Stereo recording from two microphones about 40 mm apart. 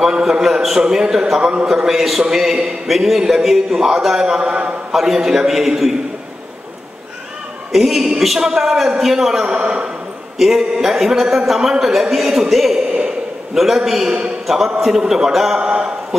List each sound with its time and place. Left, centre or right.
0.0 s a man's voice: centre
1.9 s a man's voice: centre; by 4.7 s right
4.9 s a man's voice: centre
7.7 s a man's voice: centre
9.5 s a man's voice: right
10.4 s a man's voice: centre
15.3 s a man's voice: centre
15.6 s a sound: right